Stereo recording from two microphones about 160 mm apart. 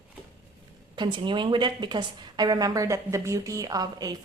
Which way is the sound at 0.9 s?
30° right (ahead or behind).